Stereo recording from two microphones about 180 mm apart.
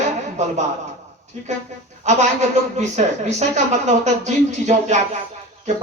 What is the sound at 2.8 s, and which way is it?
Speech, 40° right (ahead or behind).